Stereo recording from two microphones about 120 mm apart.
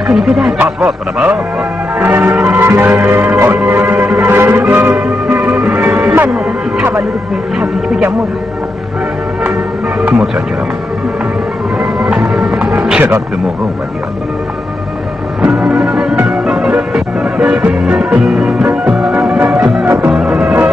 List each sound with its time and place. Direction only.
0.1 s speech: 5° right (ahead or behind)
2.0 s music: 15° right (ahead or behind)
7.5 s music: 5° right (ahead or behind)
10.0 s speech: 5° right (ahead or behind)
11.8 s music: 5° right (ahead or behind)
15.4 s music: 5° right (ahead or behind)